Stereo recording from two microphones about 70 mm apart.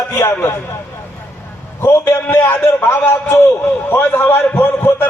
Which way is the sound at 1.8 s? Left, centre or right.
Left.